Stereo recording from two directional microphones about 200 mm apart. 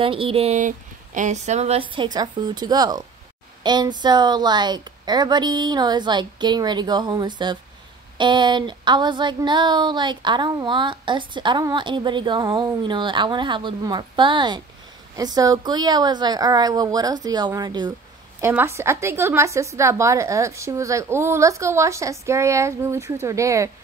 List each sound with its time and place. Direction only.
0.0 s speech: 25° right (ahead or behind)
2.1 s a sound: 20° right (ahead or behind)
18.4 s a woman's voice: 10° right (ahead or behind)